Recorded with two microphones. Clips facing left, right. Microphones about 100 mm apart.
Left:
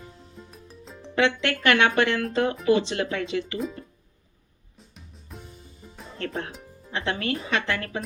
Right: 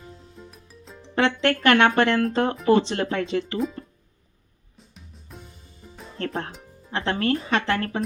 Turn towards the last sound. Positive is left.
turn(degrees=-40)  # may be behind; listen again after turning